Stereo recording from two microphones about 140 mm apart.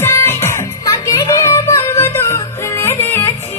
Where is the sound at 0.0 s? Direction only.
20° left (ahead or behind).